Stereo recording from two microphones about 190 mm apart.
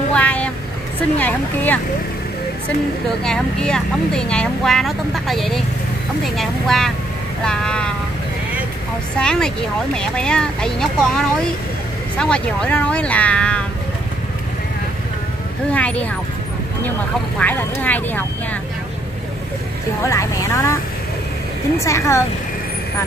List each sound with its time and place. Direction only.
0.1 s vehicle: 5° left (ahead or behind)
1.1 s speech: 10° left (ahead or behind)
3.3 s speech: 5° left (ahead or behind)
9.2 s speech: 5° left (ahead or behind)
15.7 s speech: 5° left (ahead or behind)
17.4 s speech: 10° left (ahead or behind)
20.1 s speech: 15° left (ahead or behind)
21.7 s speech: 15° left (ahead or behind)